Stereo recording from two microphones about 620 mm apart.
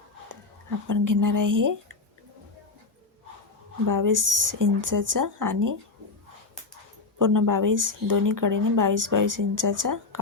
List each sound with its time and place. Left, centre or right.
0.9 s speech: right
3.8 s speech: right
7.2 s speech: right